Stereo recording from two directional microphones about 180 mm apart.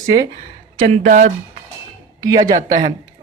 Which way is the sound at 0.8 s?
45° right (ahead or behind).